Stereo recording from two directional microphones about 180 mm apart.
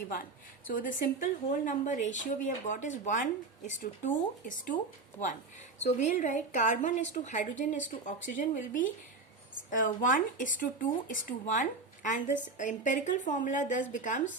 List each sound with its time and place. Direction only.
0.7 s speech: 50° left (ahead or behind)
5.8 s speech: 40° left (ahead or behind)